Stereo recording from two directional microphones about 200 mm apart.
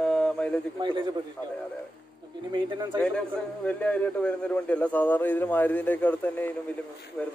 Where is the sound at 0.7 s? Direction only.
25° right (ahead or behind).